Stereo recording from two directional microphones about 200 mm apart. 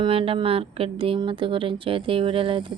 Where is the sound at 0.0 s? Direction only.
25° right (ahead or behind).